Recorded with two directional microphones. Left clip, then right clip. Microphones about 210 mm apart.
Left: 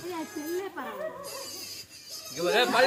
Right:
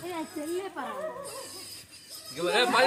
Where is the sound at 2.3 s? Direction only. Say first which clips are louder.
Left 1 dB; 15° left (ahead or behind).